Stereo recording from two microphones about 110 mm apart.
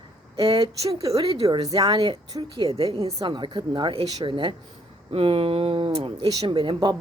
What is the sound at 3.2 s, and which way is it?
Speech, 45° right (ahead or behind).